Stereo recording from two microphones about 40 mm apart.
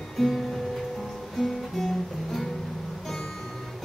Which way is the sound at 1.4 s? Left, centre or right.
Centre.